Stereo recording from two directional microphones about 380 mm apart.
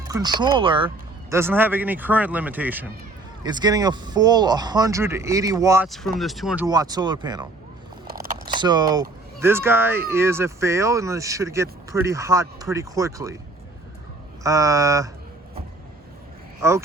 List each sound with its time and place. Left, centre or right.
0.1 s speech: centre
8.0 s a sound: right
8.4 s speech: centre
14.4 s speech: centre
16.6 s speech: centre